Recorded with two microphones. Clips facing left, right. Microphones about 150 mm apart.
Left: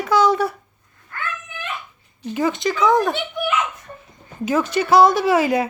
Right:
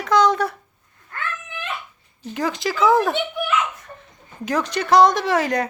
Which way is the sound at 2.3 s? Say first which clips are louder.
Left 2 dB; centre (ahead or behind).